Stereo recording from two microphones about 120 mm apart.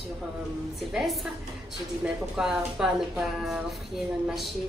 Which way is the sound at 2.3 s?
5° right (ahead or behind).